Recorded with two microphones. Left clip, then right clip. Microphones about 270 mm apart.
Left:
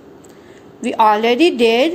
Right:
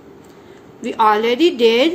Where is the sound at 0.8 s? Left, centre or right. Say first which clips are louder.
Left 2 dB; left.